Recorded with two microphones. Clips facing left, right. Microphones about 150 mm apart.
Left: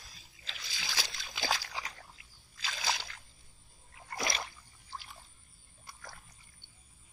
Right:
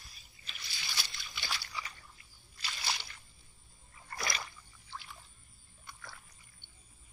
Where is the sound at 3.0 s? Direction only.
90° left.